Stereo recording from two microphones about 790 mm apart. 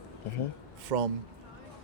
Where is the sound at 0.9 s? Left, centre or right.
Right.